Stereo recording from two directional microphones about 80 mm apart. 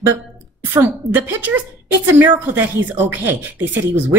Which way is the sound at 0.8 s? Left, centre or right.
Right.